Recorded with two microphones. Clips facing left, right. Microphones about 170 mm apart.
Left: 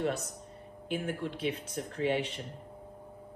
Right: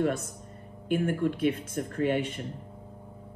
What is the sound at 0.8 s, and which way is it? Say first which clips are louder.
Speech: right 8 dB; 55° right (ahead or behind).